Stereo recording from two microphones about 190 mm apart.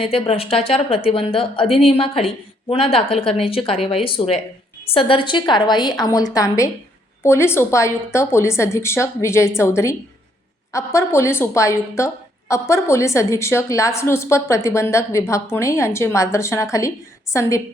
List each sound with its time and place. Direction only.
0.0 s a woman's voice: 30° left (ahead or behind); by 16.6 s 15° left (ahead or behind)